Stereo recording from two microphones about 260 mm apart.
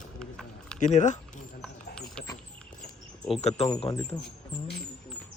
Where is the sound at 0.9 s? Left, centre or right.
Left.